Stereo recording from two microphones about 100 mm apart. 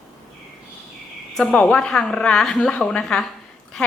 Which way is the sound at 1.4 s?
10° left (ahead or behind).